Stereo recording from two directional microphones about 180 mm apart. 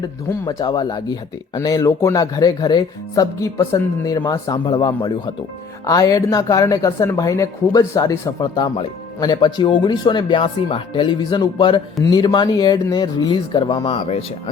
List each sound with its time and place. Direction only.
0.3 s speech: 20° left (ahead or behind)